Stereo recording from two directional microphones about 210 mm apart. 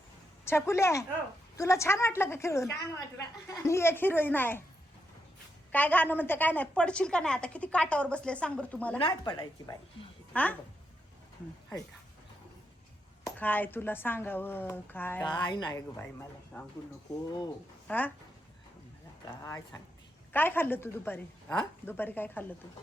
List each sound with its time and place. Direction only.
0.4 s speech: 10° left (ahead or behind)
5.7 s a woman's voice: 10° left (ahead or behind)
9.0 s a woman's voice: 25° left (ahead or behind)
10.3 s speech: 5° left (ahead or behind)
13.2 s speech: 10° left (ahead or behind)
15.3 s a woman's voice: 20° left (ahead or behind)
17.8 s speech: 10° left (ahead or behind)
19.4 s speech: 15° left (ahead or behind)